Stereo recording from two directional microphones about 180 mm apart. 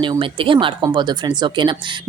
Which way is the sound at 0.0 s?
30° right (ahead or behind).